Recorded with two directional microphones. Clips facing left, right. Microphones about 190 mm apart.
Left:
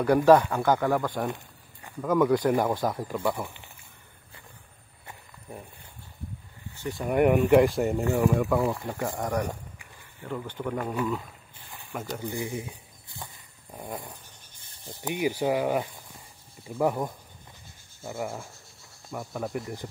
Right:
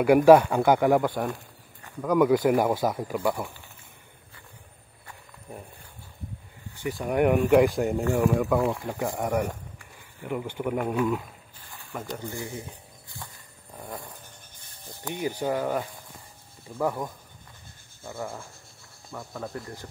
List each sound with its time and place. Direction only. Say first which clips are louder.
0.0 s speech: right 3 dB; 10° right (ahead or behind)
2.2 s speech: right 3 dB; 5° right (ahead or behind)
6.9 s speech: even; centre (ahead or behind)
11.9 s speech: even; 5° left (ahead or behind)
12.3 s a sound: left 3 dB; 15° left (ahead or behind)
13.7 s dog: left 2 dB; 20° left (ahead or behind)
14.9 s speech: left 3 dB; 15° left (ahead or behind)
18.1 s speech: left 2 dB; 10° left (ahead or behind)